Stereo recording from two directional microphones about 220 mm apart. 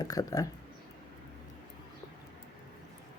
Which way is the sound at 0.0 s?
15° left (ahead or behind).